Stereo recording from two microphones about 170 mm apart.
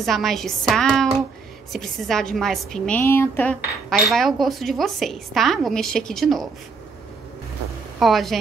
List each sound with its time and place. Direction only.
0.0 s a woman's voice: centre (ahead or behind)
3.0 s a sound: 15° left (ahead or behind)
3.9 s a woman's voice: centre (ahead or behind)
8.0 s a woman's voice: centre (ahead or behind)